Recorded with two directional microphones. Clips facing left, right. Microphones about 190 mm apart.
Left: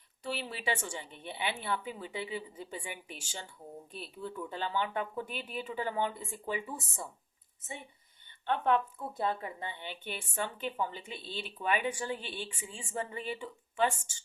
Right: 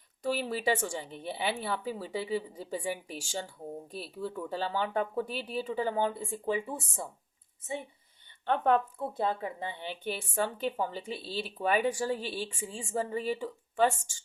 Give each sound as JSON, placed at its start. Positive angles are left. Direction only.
{"t": 0.3, "sound": "a woman's voice", "side_deg": -40}
{"t": 8.4, "sound": "a woman's voice", "side_deg": -40}
{"t": 9.0, "sound": "a woman's voice", "side_deg": -30}